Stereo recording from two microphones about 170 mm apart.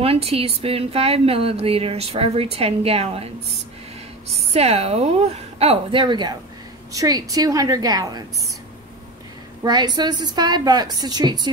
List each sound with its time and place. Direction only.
0.0 s speech: 35° right (ahead or behind)
4.6 s a woman's voice: 35° right (ahead or behind)
9.6 s a woman's voice: 25° right (ahead or behind)